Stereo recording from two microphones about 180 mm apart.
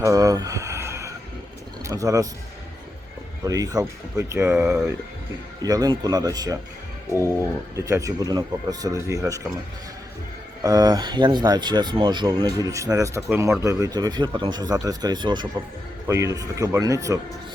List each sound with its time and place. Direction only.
0.0 s a sound: 20° right (ahead or behind)
1.8 s speech: 20° right (ahead or behind)
3.4 s speech: 20° right (ahead or behind)
7.1 s speech: 15° left (ahead or behind)
7.8 s speech: 15° right (ahead or behind)
10.6 s speech: 20° right (ahead or behind)